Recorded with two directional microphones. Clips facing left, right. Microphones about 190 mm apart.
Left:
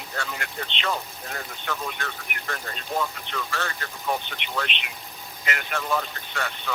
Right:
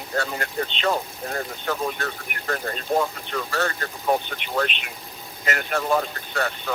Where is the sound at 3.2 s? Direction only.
40° right (ahead or behind).